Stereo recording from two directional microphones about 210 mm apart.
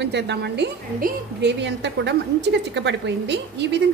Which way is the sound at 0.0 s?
55° right (ahead or behind).